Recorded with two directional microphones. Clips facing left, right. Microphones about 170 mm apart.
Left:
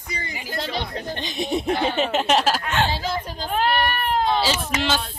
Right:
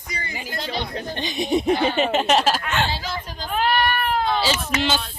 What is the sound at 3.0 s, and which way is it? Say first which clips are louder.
Speech: left 4 dB; 45° left (ahead or behind).